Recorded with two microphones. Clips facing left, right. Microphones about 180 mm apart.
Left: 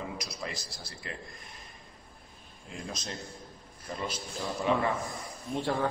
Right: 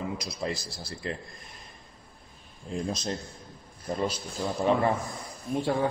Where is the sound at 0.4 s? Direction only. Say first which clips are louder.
Right 7 dB; 30° right (ahead or behind).